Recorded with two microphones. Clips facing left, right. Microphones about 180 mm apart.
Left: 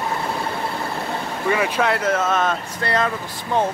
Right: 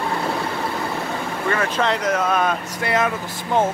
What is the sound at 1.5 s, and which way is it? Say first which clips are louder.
Speech: left 1 dB; 10° left (ahead or behind).